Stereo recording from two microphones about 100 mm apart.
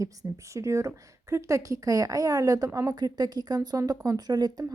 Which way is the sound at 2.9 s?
45° right (ahead or behind).